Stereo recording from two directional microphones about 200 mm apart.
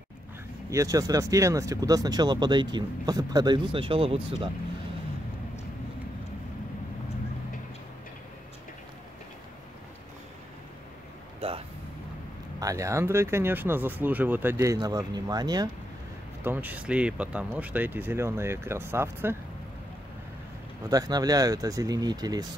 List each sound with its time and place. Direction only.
0.7 s speech: 15° right (ahead or behind)
12.5 s speech: 15° right (ahead or behind)
16.4 s speech: 10° right (ahead or behind)
20.9 s speech: 20° right (ahead or behind)